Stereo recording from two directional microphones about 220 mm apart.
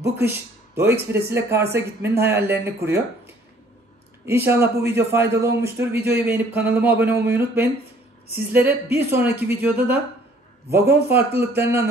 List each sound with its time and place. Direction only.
0.0 s a man's voice: 10° right (ahead or behind)
11.1 s a man's voice: 10° right (ahead or behind)